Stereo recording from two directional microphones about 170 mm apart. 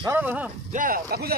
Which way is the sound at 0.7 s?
55° right (ahead or behind).